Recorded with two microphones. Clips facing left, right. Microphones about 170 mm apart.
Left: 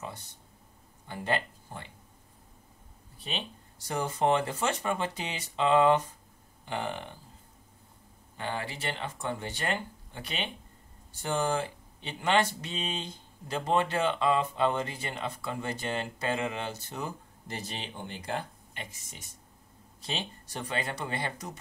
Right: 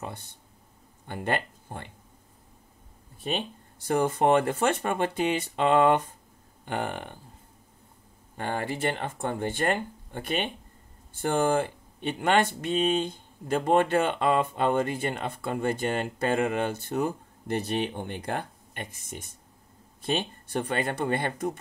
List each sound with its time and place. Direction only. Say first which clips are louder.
0.0 s a sound: right 3 dB; 55° right (ahead or behind)
1.0 s speech: right 2 dB; 55° right (ahead or behind)
3.2 s speech: right 7 dB; 50° right (ahead or behind)
8.4 s speech: right 6 dB; 50° right (ahead or behind)